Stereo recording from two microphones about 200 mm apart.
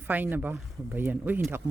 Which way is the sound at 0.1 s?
10° right (ahead or behind).